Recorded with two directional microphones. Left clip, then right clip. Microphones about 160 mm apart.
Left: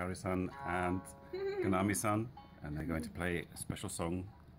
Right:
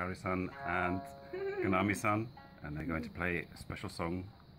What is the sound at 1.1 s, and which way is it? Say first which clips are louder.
Speech: even; 5° left (ahead or behind).